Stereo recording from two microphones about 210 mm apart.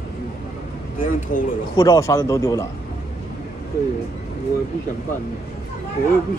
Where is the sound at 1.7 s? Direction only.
15° left (ahead or behind).